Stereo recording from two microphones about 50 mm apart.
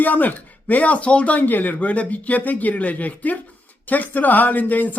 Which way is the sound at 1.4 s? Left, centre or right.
Left.